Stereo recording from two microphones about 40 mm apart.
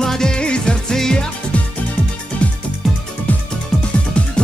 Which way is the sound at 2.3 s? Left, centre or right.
Left.